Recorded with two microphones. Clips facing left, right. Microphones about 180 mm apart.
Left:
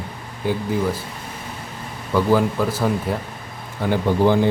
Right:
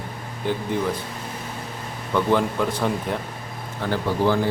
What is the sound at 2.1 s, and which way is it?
Speech, 5° left (ahead or behind).